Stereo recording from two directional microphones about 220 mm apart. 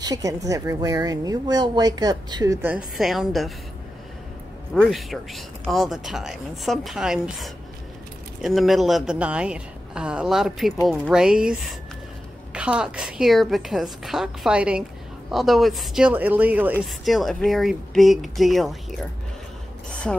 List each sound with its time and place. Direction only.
0.0 s speech: 15° right (ahead or behind)
3.0 s a woman's voice: centre (ahead or behind)
4.7 s a woman's voice: centre (ahead or behind)
19.9 s a sound: 5° left (ahead or behind)